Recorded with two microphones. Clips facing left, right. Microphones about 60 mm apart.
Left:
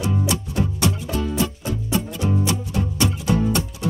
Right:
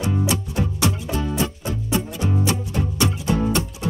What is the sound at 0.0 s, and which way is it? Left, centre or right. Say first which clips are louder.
Music: even; right.